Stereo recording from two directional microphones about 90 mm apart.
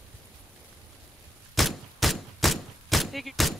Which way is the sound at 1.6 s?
Centre (ahead or behind).